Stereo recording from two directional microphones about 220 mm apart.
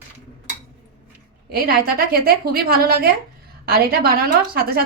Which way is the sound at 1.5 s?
40° right (ahead or behind).